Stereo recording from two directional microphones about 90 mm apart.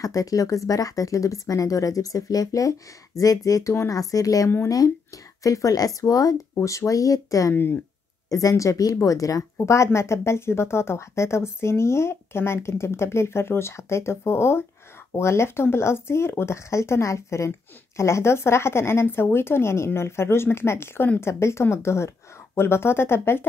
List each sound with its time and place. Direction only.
0.0 s speech: 40° left (ahead or behind)
7.5 s speech: 25° left (ahead or behind)
8.3 s speech: 40° left (ahead or behind)